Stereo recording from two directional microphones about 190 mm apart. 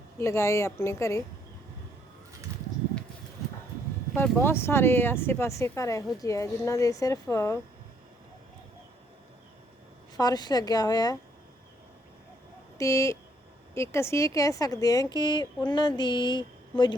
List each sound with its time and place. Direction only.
0.2 s speech: 15° left (ahead or behind)
4.1 s speech: 10° left (ahead or behind)
10.2 s speech: 20° left (ahead or behind)
12.8 s speech: 15° left (ahead or behind)